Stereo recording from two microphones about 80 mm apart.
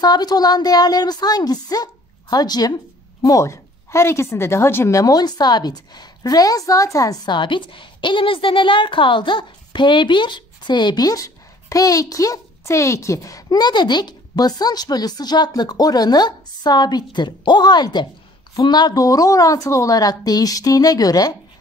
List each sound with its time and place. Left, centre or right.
0.0 s speech: left
3.3 s a woman's voice: left
7.2 s a woman's voice: left
13.5 s a woman's voice: left